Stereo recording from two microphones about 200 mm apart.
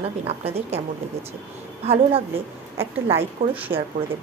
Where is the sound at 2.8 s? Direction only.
10° right (ahead or behind).